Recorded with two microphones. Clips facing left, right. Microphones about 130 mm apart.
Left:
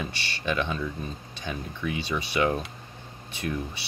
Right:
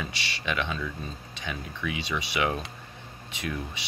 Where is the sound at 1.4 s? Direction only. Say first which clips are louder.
Left 2 dB; 35° left (ahead or behind).